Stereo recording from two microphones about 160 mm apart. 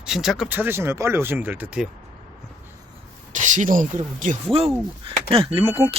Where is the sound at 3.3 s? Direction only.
50° right (ahead or behind).